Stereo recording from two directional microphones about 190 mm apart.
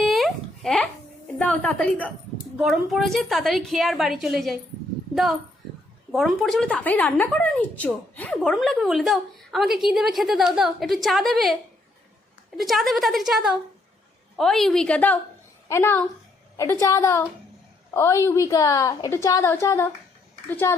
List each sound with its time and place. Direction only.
0.0 s a sound: centre (ahead or behind)
1.4 s a woman's voice: 5° left (ahead or behind)
6.1 s a woman's voice: centre (ahead or behind)
12.5 s a woman's voice: centre (ahead or behind)